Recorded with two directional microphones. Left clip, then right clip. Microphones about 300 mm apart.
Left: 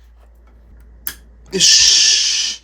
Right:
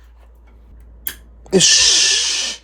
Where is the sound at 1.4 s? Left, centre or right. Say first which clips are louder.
Left 1 dB; centre.